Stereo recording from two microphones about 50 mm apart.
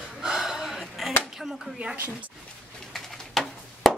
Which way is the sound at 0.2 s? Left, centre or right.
Centre.